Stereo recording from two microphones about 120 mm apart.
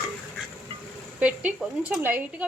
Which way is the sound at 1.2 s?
10° right (ahead or behind).